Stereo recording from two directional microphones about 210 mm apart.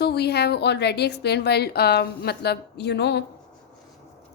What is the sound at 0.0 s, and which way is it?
A woman's voice, 50° left (ahead or behind).